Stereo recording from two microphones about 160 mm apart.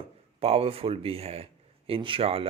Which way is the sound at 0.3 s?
40° right (ahead or behind).